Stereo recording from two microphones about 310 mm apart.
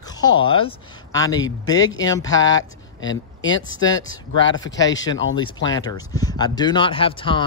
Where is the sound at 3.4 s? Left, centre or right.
Left.